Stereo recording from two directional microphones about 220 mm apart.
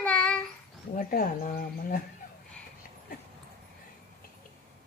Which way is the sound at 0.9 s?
40° left (ahead or behind).